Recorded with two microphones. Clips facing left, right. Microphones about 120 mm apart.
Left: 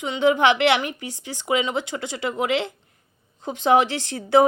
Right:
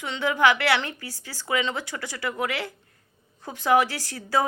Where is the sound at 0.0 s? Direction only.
20° left (ahead or behind).